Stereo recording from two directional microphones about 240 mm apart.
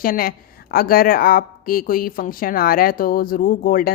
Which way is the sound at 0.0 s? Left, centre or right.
Left.